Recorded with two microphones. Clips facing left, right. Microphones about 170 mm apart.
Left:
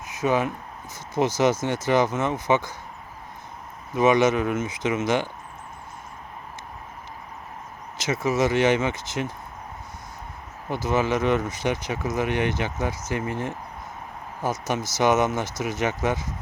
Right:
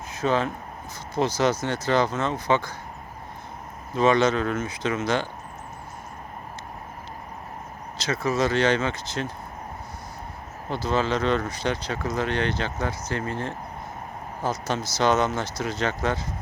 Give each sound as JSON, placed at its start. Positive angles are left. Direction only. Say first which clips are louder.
{"t": 0.2, "sound": "speech", "louder": "left 1 dB", "side_deg": 15}
{"t": 3.9, "sound": "speech", "louder": "left 1 dB", "side_deg": 15}
{"t": 8.0, "sound": "speech", "louder": "left 1 dB", "side_deg": 20}
{"t": 10.8, "sound": "speech", "louder": "left 1 dB", "side_deg": 20}
{"t": 14.7, "sound": "speech", "louder": "left 1 dB", "side_deg": 20}